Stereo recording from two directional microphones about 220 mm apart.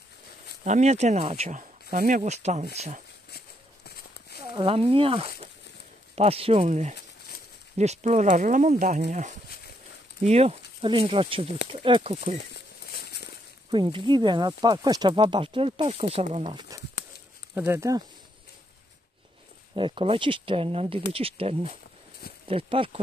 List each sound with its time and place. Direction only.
0.7 s speech: 30° right (ahead or behind)
3.3 s horse: 45° left (ahead or behind)
4.6 s speech: 25° right (ahead or behind)
12.5 s a sound: 45° left (ahead or behind)
13.7 s speech: 20° right (ahead or behind)
17.6 s speech: 10° right (ahead or behind)
19.7 s speech: 25° right (ahead or behind)